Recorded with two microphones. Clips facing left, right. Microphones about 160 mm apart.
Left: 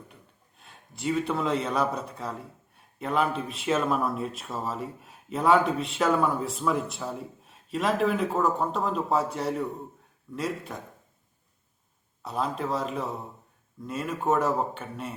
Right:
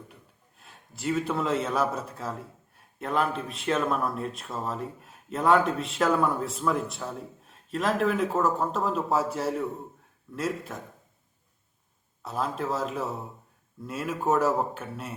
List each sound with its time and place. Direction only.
0.1 s a man's voice: centre (ahead or behind)
12.2 s a man's voice: centre (ahead or behind)